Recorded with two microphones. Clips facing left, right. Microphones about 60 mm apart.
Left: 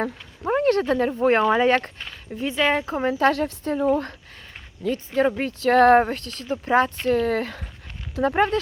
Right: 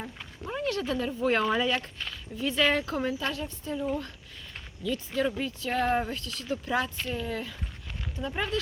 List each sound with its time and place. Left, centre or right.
0.4 s speech: left
2.5 s speech: left
3.1 s speech: left
5.5 s speech: left
6.1 s speech: left
6.4 s speech: left
7.0 s speech: left